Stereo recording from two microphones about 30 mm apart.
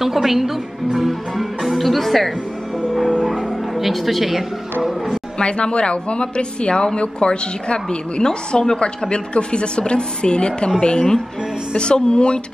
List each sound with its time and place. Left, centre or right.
0.0 s a woman's voice: centre
3.3 s a woman's voice: centre
5.4 s speech: left